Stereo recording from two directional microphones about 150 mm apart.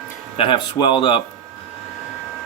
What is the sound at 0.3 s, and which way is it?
Speech, 35° left (ahead or behind).